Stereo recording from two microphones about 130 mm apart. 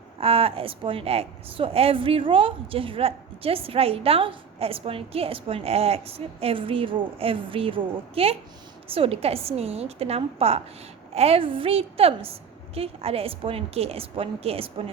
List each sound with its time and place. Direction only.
0.2 s a woman's voice: 45° right (ahead or behind)